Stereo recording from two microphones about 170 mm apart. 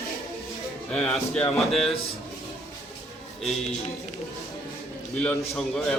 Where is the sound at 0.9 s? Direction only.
5° left (ahead or behind).